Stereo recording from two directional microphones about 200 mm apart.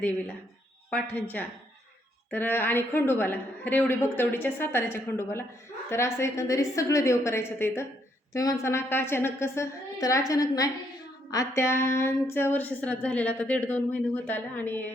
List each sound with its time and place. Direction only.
0.9 s speech: 10° left (ahead or behind)